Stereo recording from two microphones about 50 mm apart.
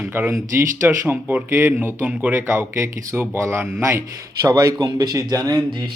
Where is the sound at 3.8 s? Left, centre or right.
Right.